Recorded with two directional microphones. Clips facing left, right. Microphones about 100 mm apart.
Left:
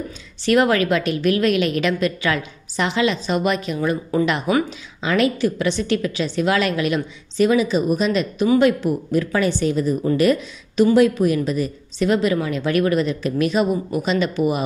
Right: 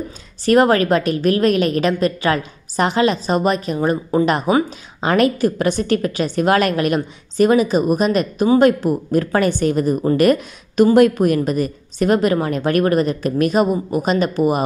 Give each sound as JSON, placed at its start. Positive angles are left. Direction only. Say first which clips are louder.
{"t": 0.5, "sound": "a woman's voice", "louder": "right 3 dB", "side_deg": -40}